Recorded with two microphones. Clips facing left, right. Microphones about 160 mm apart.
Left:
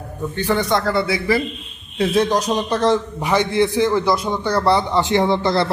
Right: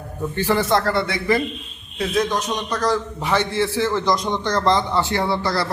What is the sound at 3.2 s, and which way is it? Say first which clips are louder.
A man's voice: left 3 dB; 15° left (ahead or behind).